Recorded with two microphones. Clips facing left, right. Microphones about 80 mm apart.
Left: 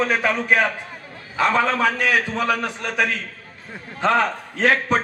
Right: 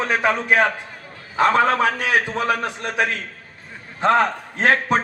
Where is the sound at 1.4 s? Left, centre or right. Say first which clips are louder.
Right 3 dB; right.